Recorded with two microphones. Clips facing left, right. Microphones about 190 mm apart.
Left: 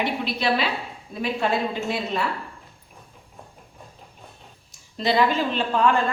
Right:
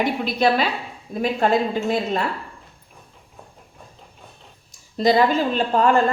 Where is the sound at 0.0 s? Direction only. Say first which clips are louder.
Right 5 dB; 45° right (ahead or behind).